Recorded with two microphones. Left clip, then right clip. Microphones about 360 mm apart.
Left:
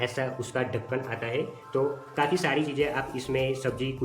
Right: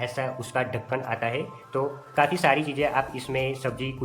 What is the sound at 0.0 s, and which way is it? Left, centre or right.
Speech, centre.